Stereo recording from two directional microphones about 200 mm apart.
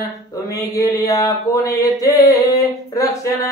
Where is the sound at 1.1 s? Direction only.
15° left (ahead or behind).